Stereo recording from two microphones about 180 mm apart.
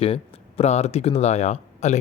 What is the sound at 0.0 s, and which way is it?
Speech, 35° left (ahead or behind).